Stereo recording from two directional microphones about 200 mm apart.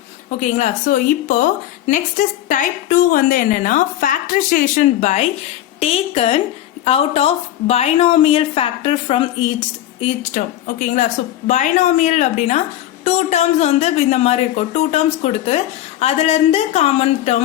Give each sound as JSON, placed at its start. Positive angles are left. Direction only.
{"t": 0.3, "sound": "a woman's voice", "side_deg": 35}
{"t": 10.0, "sound": "speech", "side_deg": 35}